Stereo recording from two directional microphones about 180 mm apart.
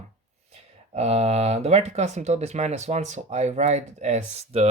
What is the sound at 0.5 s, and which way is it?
Speech, 35° right (ahead or behind).